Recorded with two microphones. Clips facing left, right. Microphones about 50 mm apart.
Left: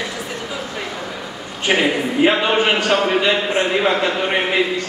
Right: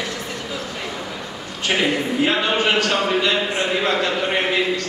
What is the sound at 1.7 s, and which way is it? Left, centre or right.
Speech, left.